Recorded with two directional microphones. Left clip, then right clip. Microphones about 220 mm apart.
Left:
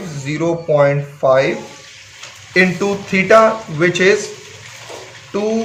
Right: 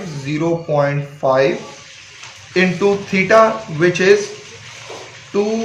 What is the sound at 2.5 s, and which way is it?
A man's voice, 30° left (ahead or behind).